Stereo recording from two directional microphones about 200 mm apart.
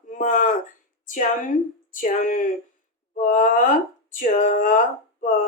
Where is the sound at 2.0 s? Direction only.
40° left (ahead or behind).